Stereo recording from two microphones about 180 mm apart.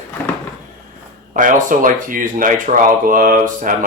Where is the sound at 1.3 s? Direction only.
50° right (ahead or behind).